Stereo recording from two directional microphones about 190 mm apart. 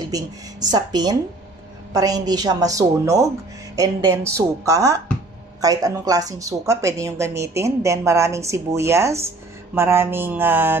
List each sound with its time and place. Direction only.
0.1 s a woman's voice: 20° right (ahead or behind)